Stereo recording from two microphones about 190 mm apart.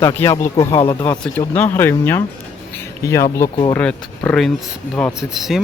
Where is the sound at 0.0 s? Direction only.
15° left (ahead or behind).